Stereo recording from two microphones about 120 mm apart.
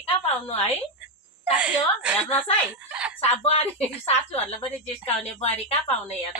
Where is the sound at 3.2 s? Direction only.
55° left (ahead or behind).